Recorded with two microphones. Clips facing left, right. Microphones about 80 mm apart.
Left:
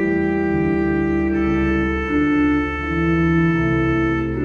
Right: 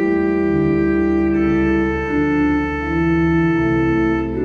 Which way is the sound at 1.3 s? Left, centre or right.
Centre.